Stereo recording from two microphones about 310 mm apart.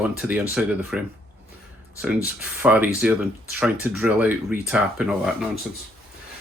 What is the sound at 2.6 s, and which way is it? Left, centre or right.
Speech, centre.